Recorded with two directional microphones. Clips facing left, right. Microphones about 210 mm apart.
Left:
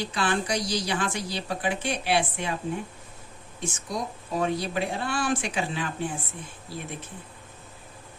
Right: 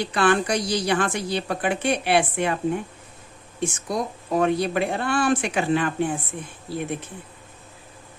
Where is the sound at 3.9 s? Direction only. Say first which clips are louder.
Right 5 dB; 60° right (ahead or behind).